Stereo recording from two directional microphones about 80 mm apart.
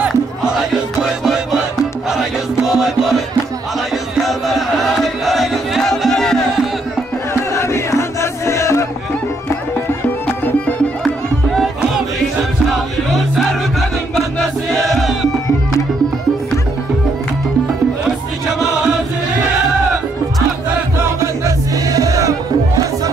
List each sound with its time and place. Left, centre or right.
1.2 s music: centre
2.6 s music: centre
7.5 s music: left
11.5 s music: centre
14.7 s music: centre
21.5 s music: right